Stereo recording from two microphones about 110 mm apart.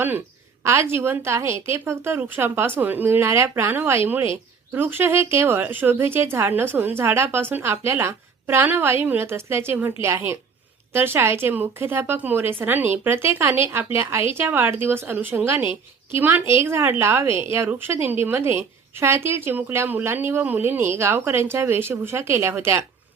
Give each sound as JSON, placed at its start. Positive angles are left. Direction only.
{"t": 0.6, "sound": "a woman's voice", "side_deg": -25}